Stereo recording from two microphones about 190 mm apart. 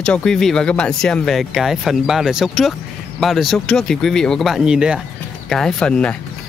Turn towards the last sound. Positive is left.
turn(degrees=5)  # may be behind; listen again after turning